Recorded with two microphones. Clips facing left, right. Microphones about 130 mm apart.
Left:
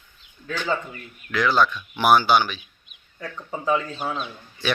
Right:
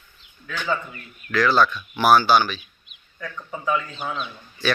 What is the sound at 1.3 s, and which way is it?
Speech, 15° left (ahead or behind).